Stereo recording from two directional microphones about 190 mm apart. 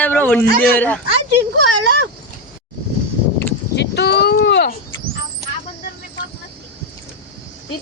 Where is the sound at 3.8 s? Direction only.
60° left (ahead or behind).